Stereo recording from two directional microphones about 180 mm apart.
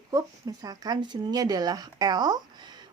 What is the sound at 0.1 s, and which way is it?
Speech, 20° right (ahead or behind).